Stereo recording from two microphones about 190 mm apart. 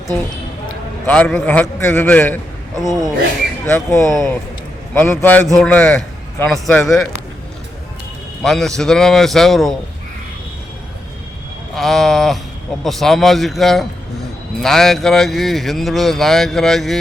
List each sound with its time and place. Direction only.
1.0 s a man's voice: 5° left (ahead or behind)
2.8 s speech: 20° right (ahead or behind)
3.7 s a man's voice: 15° left (ahead or behind)
4.0 s a man's voice: centre (ahead or behind)
8.4 s speech: centre (ahead or behind)
11.7 s speech: centre (ahead or behind)